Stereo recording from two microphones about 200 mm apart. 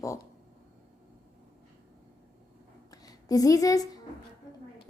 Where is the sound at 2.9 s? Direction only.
20° left (ahead or behind).